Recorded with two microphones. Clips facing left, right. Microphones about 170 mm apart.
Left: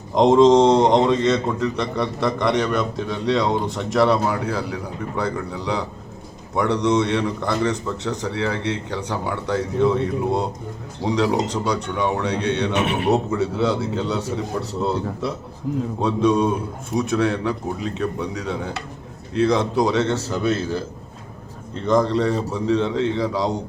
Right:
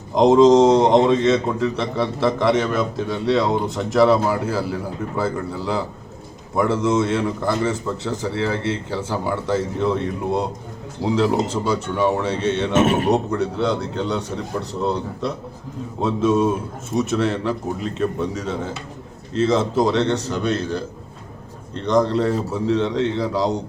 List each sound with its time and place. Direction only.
0.1 s a man's voice: centre (ahead or behind)
12.7 s speech: 45° right (ahead or behind)
13.1 s a man's voice: centre (ahead or behind)
21.8 s a man's voice: centre (ahead or behind)